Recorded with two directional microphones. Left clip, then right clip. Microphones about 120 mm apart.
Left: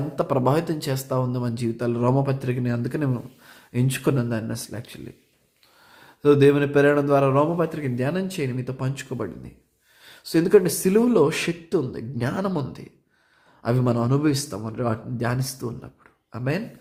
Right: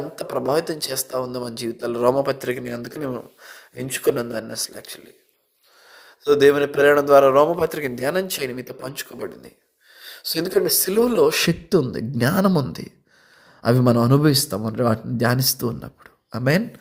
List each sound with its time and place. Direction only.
0.2 s speech: 30° right (ahead or behind); by 16.6 s 45° right (ahead or behind)